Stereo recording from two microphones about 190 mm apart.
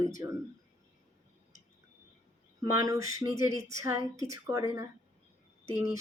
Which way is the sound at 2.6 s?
20° right (ahead or behind).